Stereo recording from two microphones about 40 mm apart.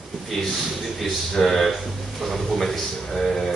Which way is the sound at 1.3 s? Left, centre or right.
Centre.